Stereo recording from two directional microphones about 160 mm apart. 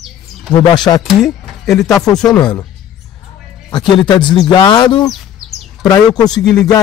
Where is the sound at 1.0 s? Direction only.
Centre (ahead or behind).